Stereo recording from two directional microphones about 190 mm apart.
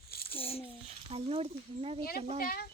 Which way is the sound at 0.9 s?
30° right (ahead or behind).